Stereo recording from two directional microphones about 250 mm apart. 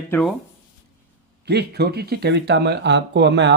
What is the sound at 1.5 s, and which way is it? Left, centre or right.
A man's voice, right.